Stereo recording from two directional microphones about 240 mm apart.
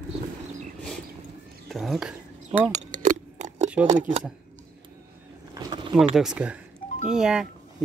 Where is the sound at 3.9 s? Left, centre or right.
Right.